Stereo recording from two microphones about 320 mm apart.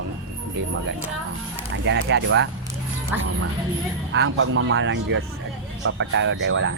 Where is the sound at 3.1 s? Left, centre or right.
Centre.